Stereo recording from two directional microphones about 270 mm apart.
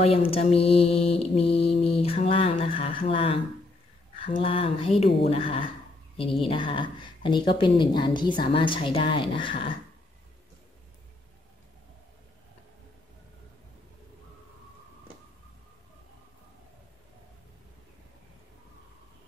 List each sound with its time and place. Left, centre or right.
0.0 s mantra: left
6.4 s a woman's voice: centre